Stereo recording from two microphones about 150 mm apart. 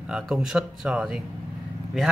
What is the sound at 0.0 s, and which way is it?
Speech, 5° right (ahead or behind).